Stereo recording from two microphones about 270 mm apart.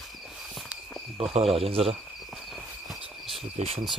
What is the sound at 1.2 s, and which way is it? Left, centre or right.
Speech, right.